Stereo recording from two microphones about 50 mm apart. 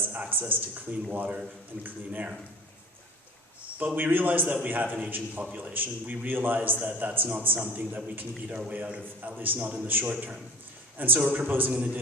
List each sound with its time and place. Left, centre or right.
0.1 s a man's voice: right
3.9 s a man's voice: right